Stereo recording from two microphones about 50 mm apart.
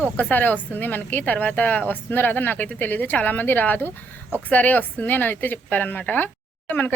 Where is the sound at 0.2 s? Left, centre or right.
Left.